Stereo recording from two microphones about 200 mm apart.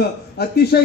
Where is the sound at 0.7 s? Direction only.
50° left (ahead or behind).